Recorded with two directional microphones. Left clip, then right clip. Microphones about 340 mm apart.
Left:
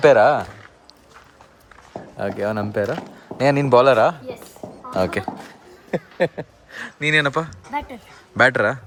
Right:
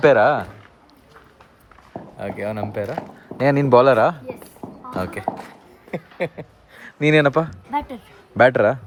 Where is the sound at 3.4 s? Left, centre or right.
Centre.